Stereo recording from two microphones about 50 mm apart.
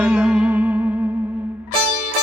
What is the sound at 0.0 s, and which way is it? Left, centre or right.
Music, right.